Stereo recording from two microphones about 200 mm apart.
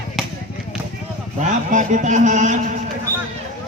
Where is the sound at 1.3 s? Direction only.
40° right (ahead or behind).